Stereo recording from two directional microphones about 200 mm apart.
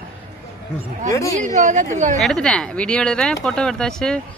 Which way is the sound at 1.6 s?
40° right (ahead or behind).